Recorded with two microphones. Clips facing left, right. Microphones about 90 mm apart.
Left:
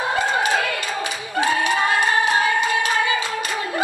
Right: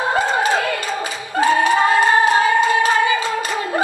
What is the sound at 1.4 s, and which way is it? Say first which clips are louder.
Singing: right 5 dB; 35° right (ahead or behind).